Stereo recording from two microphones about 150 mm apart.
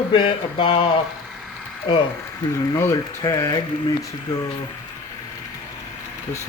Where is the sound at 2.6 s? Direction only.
20° left (ahead or behind).